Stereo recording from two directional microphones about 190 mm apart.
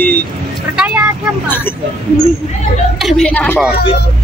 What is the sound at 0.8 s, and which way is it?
Vehicle, 5° right (ahead or behind).